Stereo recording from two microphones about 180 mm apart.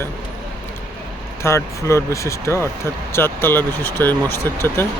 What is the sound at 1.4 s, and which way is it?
Speech, 15° left (ahead or behind).